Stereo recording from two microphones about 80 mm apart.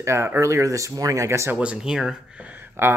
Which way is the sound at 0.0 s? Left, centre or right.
Right.